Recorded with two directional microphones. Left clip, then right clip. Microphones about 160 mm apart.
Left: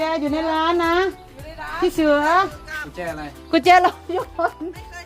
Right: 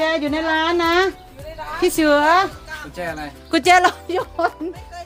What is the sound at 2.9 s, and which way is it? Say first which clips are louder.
Speech: right 5 dB; 45° right (ahead or behind).